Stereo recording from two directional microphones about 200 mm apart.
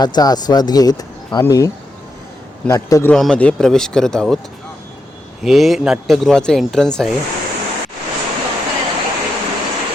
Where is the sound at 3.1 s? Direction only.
5° left (ahead or behind).